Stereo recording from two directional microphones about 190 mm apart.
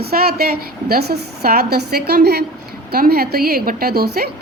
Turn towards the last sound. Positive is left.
turn(degrees=-55)  # may be behind; listen again after turning